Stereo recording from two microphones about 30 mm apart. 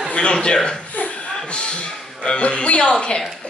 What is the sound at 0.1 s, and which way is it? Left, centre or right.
Speech, left.